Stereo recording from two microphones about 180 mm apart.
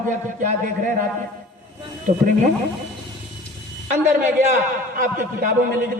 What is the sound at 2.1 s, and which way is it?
Speech, 40° right (ahead or behind).